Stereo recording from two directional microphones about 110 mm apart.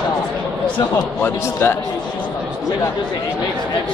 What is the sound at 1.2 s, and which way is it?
Speech, 20° left (ahead or behind).